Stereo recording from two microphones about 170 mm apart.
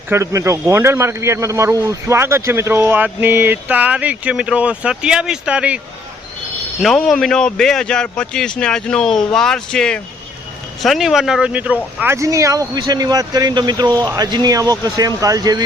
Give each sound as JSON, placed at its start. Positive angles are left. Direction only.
{"t": 0.1, "sound": "speech", "side_deg": -15}
{"t": 6.8, "sound": "a man's voice", "side_deg": 0}